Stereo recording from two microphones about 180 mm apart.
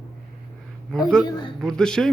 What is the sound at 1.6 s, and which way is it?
Speech, 5° left (ahead or behind).